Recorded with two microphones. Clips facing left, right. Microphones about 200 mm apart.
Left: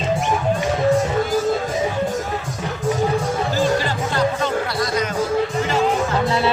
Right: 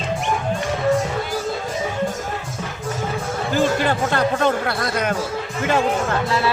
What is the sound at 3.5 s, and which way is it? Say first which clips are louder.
Music: right 4 dB; 55° right (ahead or behind).